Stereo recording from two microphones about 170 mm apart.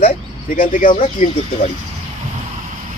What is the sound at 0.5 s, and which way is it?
Speech, 50° left (ahead or behind).